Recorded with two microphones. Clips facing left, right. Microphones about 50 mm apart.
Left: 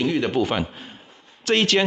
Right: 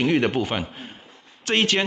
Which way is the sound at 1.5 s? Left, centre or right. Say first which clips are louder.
Left 2 dB; centre.